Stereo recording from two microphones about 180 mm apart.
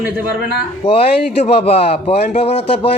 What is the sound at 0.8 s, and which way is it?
Speech, 30° left (ahead or behind).